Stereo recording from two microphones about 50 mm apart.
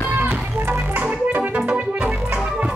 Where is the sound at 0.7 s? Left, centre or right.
Right.